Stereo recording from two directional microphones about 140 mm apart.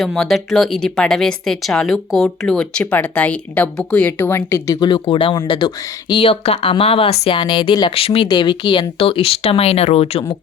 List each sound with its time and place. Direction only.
0.0 s speech: centre (ahead or behind); by 10.3 s 45° left (ahead or behind)